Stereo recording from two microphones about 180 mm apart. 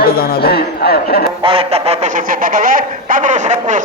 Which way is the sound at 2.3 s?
50° right (ahead or behind).